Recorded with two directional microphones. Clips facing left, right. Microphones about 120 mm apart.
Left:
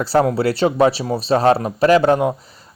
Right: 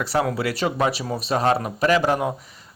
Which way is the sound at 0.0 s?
30° left (ahead or behind).